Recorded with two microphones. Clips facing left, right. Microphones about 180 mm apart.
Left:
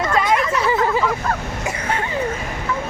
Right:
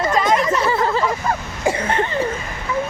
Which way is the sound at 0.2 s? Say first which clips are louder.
Right 1 dB; 10° left (ahead or behind).